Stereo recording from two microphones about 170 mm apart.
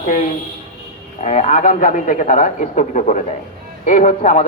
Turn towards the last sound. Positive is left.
turn(degrees=45)  # may be behind; listen again after turning